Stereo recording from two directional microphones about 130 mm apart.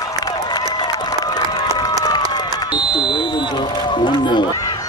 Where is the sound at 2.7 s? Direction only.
35° left (ahead or behind).